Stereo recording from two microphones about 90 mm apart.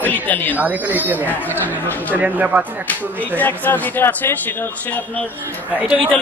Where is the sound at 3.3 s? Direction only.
20° left (ahead or behind).